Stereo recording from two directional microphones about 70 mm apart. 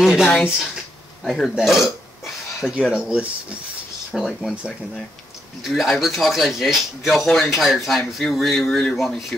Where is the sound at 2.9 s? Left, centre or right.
Centre.